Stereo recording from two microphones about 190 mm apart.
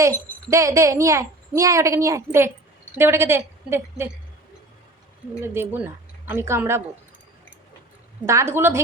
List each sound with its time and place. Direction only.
0.5 s a woman's voice: 15° right (ahead or behind)
5.4 s a woman's voice: 10° right (ahead or behind)
8.3 s a woman's voice: 15° right (ahead or behind)